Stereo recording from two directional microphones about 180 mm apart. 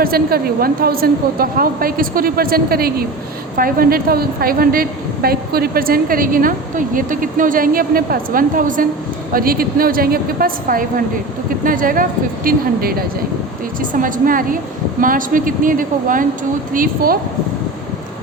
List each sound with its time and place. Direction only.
0.0 s a woman's voice: 55° right (ahead or behind)